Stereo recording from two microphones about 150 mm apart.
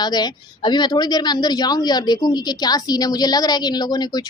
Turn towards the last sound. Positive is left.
turn(degrees=25)  # may be behind; listen again after turning